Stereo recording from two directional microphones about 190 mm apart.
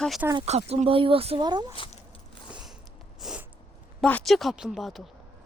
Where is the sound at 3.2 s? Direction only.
5° right (ahead or behind).